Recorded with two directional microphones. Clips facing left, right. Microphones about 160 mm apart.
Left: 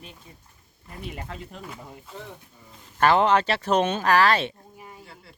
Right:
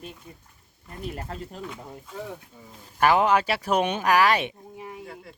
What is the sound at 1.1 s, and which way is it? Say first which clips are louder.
Speech: right 2 dB; 40° right (ahead or behind).